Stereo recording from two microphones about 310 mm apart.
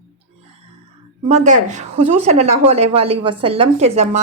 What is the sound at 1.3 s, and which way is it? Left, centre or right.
A woman's voice, right.